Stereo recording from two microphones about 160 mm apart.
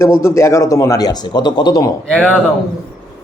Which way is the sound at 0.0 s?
15° left (ahead or behind).